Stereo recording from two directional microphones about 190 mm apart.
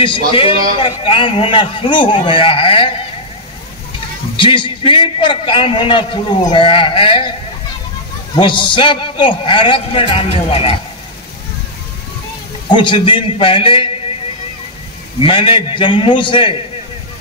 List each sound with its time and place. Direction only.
0.0 s a man's voice: 25° left (ahead or behind)
4.4 s a man's voice: 25° left (ahead or behind)
8.4 s a man's voice: 25° left (ahead or behind)
12.7 s a man's voice: 25° left (ahead or behind)
15.1 s a man's voice: 30° left (ahead or behind)